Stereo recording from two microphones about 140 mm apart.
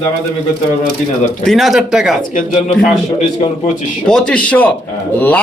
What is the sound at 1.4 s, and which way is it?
Speech, centre (ahead or behind).